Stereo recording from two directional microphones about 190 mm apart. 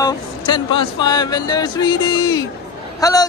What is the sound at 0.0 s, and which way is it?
Speech, 25° left (ahead or behind).